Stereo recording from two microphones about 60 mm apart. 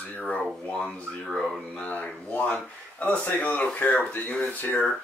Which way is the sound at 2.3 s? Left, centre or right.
Left.